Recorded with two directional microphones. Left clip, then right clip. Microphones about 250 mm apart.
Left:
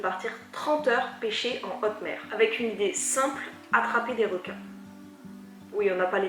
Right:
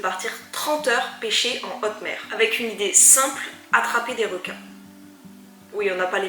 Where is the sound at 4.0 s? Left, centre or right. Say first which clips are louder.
Right 3 dB; centre.